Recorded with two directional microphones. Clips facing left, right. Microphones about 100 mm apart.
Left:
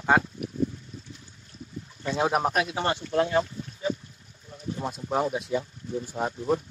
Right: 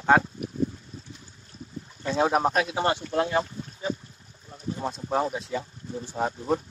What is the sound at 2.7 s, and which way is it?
Speech, 25° right (ahead or behind).